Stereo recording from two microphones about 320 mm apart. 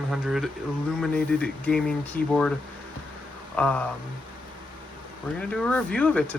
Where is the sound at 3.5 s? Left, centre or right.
Centre.